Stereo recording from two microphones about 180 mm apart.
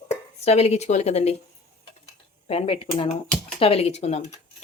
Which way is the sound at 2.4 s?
30° left (ahead or behind).